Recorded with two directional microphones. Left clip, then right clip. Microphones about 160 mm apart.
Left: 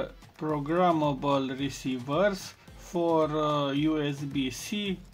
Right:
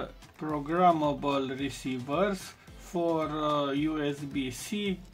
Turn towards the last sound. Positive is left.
turn(degrees=40)  # may be behind; listen again after turning